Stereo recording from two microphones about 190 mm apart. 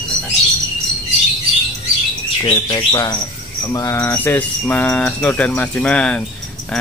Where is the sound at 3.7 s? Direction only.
15° left (ahead or behind).